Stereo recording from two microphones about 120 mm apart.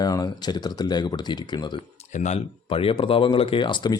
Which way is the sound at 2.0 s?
75° left (ahead or behind).